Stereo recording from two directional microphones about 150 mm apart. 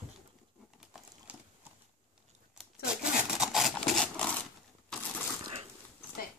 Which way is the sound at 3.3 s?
Centre (ahead or behind).